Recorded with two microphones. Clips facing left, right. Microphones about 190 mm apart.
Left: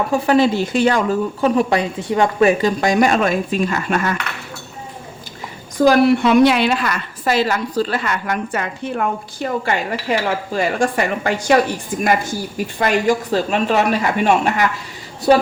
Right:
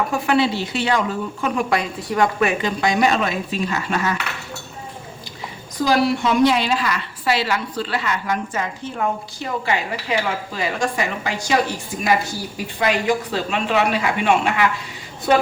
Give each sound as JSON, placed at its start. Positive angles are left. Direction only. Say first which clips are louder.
{"t": 0.1, "sound": "a woman's voice", "louder": "left 4 dB", "side_deg": 40}
{"t": 1.4, "sound": "a woman's voice", "louder": "left 4 dB", "side_deg": 35}
{"t": 5.8, "sound": "a woman's voice", "louder": "left 6 dB", "side_deg": 55}